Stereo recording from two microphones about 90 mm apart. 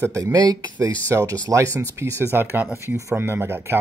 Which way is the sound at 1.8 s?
30° right (ahead or behind).